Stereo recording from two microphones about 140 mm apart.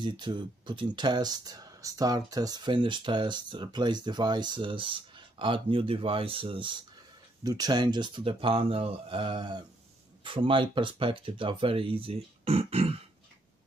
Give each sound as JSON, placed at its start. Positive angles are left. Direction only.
{"t": 0.0, "sound": "speech", "side_deg": -35}
{"t": 7.4, "sound": "speech", "side_deg": -25}